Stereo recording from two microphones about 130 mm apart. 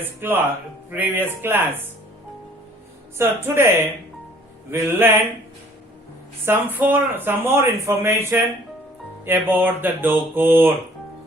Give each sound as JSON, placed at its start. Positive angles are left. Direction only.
{"t": 0.2, "sound": "speech", "side_deg": -15}
{"t": 3.2, "sound": "a woman's voice", "side_deg": -20}
{"t": 4.7, "sound": "speech", "side_deg": -15}
{"t": 6.4, "sound": "speech", "side_deg": -15}